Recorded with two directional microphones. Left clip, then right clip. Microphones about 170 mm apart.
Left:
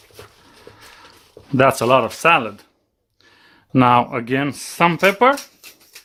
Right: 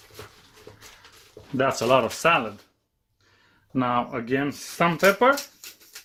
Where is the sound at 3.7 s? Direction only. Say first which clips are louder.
Left 10 dB; 40° left (ahead or behind).